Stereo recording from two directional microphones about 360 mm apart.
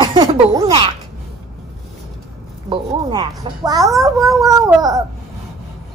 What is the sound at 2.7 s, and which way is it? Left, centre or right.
A child's voice, centre.